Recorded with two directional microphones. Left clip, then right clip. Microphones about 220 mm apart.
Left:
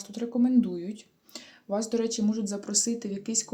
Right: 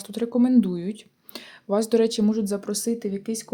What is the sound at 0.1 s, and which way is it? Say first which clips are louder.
Speech: right 5 dB; 35° right (ahead or behind).